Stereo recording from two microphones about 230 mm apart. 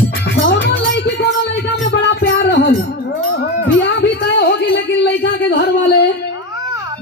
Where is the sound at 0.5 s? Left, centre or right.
Left.